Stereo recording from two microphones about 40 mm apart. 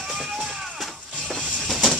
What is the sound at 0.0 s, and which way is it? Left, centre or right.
Music, centre.